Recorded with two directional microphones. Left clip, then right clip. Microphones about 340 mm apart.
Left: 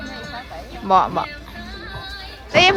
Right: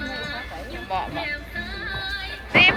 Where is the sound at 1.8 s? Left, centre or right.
Right.